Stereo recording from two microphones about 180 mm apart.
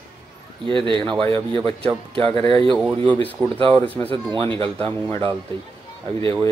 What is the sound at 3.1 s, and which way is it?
Speech, 10° left (ahead or behind).